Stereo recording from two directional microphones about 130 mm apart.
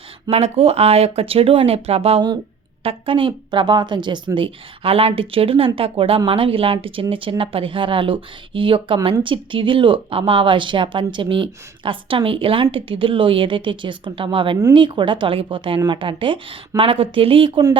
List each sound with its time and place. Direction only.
0.3 s speech: 55° right (ahead or behind)